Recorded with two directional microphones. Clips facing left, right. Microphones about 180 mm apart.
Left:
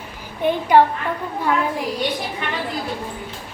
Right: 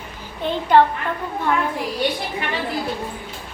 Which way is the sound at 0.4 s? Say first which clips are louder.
Left 1 dB; 10° left (ahead or behind).